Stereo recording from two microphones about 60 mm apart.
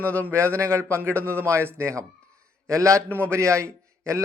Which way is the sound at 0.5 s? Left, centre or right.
Right.